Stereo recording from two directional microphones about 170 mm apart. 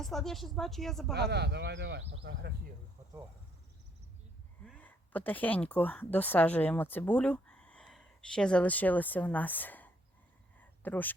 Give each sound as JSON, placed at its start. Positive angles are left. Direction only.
{"t": 0.0, "sound": "speech", "side_deg": 0}
{"t": 1.1, "sound": "speech", "side_deg": -75}
{"t": 2.2, "sound": "speech", "side_deg": -80}
{"t": 4.8, "sound": "speech", "side_deg": 10}
{"t": 10.6, "sound": "a sound", "side_deg": 10}